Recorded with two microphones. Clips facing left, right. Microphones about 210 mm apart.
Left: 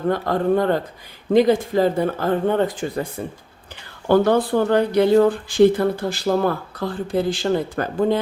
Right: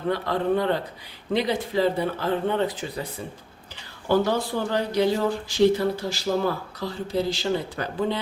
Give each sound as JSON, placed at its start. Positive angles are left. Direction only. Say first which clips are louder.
{"t": 0.1, "sound": "speech", "louder": "left 4 dB", "side_deg": 45}